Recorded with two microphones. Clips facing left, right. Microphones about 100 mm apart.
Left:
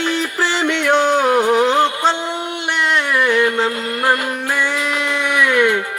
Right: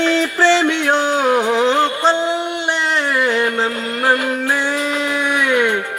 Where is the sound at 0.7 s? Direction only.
60° left (ahead or behind).